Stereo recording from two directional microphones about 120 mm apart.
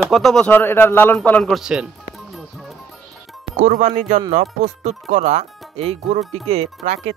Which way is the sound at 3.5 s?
90° right.